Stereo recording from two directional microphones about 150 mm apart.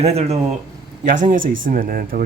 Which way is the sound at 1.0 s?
60° right (ahead or behind).